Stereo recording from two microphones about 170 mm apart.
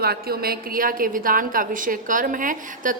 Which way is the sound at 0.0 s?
65° right (ahead or behind).